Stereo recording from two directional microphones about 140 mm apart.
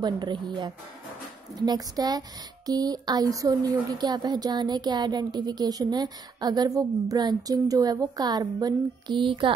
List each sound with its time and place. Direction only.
0.0 s speech: 30° right (ahead or behind)